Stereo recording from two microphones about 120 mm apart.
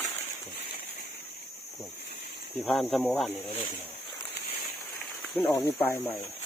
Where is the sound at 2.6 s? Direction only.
Centre (ahead or behind).